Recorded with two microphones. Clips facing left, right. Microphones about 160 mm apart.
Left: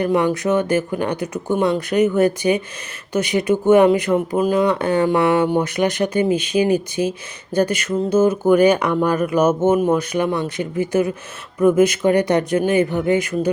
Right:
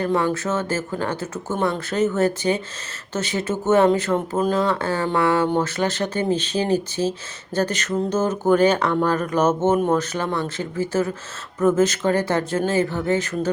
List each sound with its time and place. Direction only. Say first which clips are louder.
0.0 s speech: left 4 dB; 15° left (ahead or behind)